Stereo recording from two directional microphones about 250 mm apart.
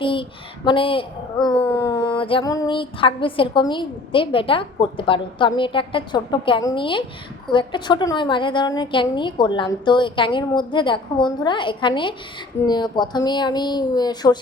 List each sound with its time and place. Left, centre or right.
0.0 s speech: centre
1.5 s a sound: centre
12.6 s speech: centre